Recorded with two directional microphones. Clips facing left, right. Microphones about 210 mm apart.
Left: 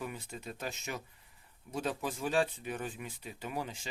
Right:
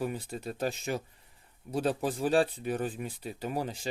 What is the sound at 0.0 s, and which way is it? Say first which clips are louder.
Speech: right 7 dB; 35° right (ahead or behind).